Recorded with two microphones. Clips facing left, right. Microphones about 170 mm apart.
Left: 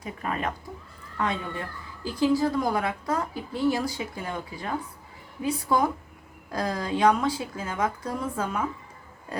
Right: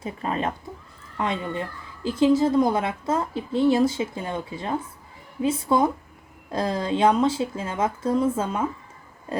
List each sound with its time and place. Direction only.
0.0 s a woman's voice: 25° right (ahead or behind)